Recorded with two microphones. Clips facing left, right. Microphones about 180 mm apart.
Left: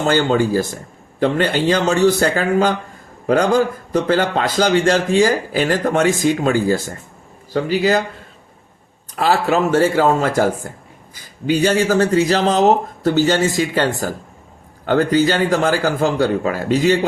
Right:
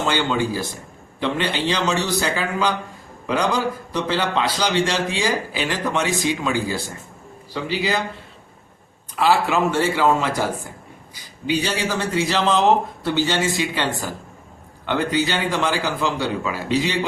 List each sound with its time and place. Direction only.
0.0 s a man's voice: 45° left (ahead or behind)
9.1 s a man's voice: 45° left (ahead or behind)